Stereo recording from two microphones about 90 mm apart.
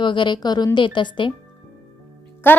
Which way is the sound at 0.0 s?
60° left (ahead or behind).